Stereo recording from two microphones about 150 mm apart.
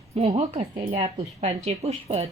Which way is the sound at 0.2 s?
45° right (ahead or behind).